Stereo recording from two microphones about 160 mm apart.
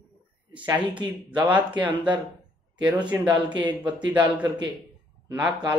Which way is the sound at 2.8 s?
10° right (ahead or behind).